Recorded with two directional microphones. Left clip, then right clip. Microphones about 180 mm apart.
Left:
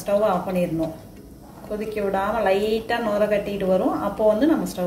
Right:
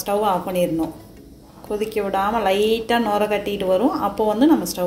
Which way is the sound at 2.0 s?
45° right (ahead or behind).